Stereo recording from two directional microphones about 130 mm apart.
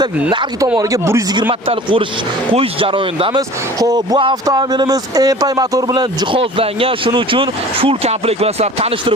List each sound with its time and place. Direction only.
0.8 s speech: 25° right (ahead or behind)
1.4 s speech: 40° right (ahead or behind)
3.8 s speech: 30° right (ahead or behind); by 9.1 s 50° right (ahead or behind)